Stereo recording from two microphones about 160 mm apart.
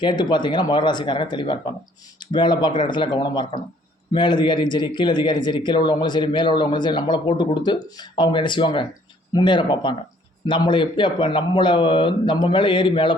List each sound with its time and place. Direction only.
0.0 s a man's voice: 30° left (ahead or behind)